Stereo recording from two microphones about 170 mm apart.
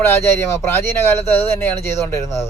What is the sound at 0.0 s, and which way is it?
Speech, 15° left (ahead or behind).